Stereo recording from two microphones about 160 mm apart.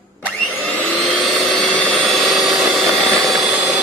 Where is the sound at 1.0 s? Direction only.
Centre (ahead or behind).